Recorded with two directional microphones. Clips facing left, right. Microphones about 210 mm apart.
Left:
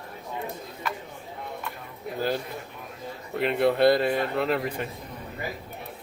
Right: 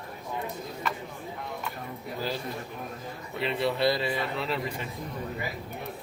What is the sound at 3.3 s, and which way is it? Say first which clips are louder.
Speech: left 6 dB; 50° left (ahead or behind).